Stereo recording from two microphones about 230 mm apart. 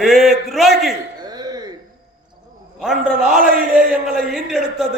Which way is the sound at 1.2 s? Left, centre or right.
Centre.